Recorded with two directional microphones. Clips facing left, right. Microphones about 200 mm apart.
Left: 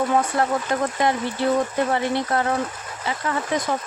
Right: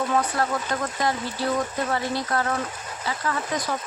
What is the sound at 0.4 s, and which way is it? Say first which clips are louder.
Speech: left 4 dB; 20° left (ahead or behind).